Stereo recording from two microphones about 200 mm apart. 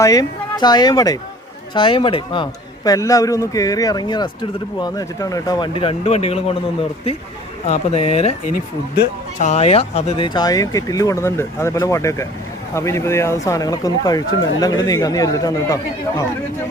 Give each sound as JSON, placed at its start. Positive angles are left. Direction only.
{"t": 0.0, "sound": "a man's voice", "side_deg": 20}
{"t": 7.7, "sound": "a man's voice", "side_deg": 30}
{"t": 9.4, "sound": "speech", "side_deg": 35}